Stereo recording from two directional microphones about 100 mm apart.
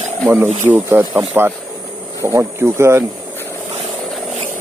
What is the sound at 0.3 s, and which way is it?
Speech, 20° right (ahead or behind).